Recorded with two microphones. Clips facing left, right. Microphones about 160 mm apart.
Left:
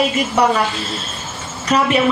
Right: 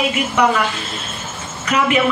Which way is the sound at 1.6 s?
35° left (ahead or behind).